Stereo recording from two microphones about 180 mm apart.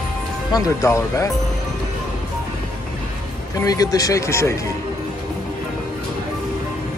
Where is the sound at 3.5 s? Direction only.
20° left (ahead or behind).